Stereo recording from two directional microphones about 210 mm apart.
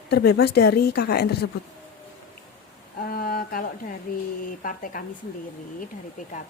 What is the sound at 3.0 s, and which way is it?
Speech, 45° left (ahead or behind).